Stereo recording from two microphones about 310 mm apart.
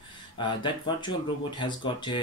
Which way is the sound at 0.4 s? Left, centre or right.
Centre.